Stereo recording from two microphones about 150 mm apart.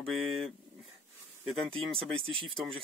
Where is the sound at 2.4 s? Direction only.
5° left (ahead or behind).